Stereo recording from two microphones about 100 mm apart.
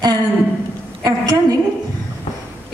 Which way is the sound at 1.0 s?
40° right (ahead or behind).